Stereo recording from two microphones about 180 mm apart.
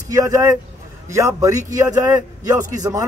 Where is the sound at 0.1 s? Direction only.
20° right (ahead or behind).